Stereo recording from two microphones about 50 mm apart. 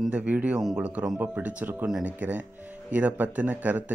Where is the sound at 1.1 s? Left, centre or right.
Right.